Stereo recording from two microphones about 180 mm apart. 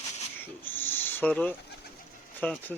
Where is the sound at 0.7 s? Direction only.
10° left (ahead or behind).